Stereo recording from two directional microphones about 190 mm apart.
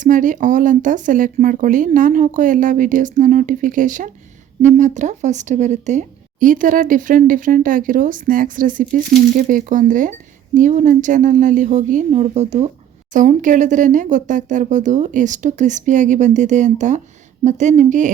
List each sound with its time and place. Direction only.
0.0 s speech: 45° right (ahead or behind)